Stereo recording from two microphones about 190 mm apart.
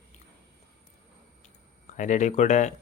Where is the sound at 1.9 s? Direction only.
40° left (ahead or behind).